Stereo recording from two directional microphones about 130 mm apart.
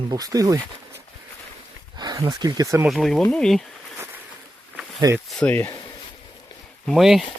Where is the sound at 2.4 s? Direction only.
30° right (ahead or behind).